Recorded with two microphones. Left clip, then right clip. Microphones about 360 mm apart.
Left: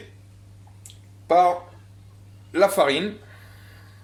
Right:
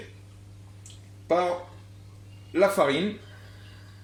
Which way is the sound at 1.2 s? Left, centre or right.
Left.